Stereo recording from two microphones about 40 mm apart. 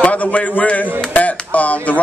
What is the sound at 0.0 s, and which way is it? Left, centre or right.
Speech, left.